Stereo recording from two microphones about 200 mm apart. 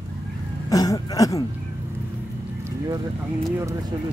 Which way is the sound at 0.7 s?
20° left (ahead or behind).